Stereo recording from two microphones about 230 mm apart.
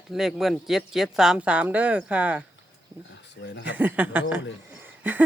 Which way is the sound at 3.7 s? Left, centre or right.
Centre.